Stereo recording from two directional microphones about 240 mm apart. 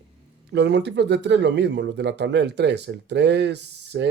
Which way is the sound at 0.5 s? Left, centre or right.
Right.